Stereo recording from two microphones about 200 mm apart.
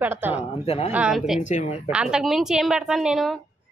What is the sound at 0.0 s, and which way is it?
Speech, 10° right (ahead or behind).